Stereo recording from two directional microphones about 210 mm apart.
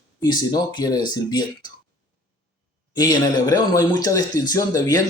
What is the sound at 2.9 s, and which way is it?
Speech, 20° left (ahead or behind).